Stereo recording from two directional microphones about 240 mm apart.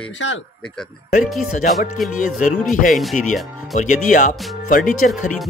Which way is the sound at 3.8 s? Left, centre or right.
Left.